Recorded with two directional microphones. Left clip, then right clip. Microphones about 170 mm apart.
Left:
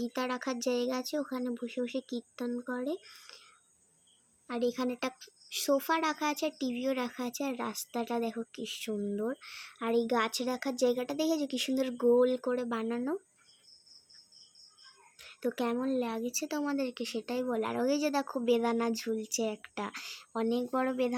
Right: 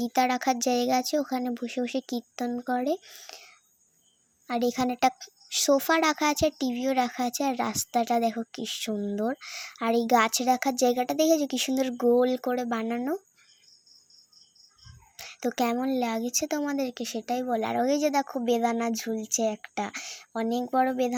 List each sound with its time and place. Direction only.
0.0 s a woman's voice: 35° right (ahead or behind)
15.2 s a woman's voice: 30° right (ahead or behind)